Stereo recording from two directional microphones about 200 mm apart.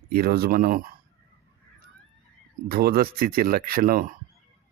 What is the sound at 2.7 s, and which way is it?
Speech, 50° right (ahead or behind).